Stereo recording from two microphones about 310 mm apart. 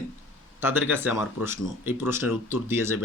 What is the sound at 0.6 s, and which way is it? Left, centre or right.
Speech, centre.